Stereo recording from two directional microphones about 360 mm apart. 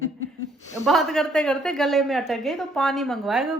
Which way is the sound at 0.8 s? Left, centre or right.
Centre.